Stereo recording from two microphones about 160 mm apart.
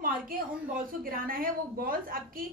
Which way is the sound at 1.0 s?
65° right (ahead or behind).